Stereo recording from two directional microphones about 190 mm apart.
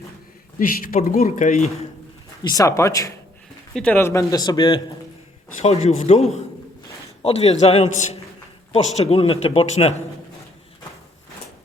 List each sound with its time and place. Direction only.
0.9 s speech: 50° left (ahead or behind)
2.5 s speech: 15° left (ahead or behind)
5.6 s speech: 35° left (ahead or behind)